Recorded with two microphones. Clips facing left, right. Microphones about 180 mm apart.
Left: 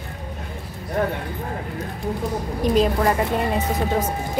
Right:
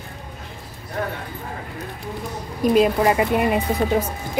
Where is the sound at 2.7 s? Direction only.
10° right (ahead or behind).